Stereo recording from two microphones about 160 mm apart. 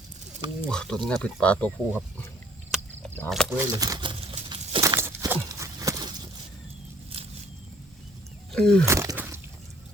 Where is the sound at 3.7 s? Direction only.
25° right (ahead or behind).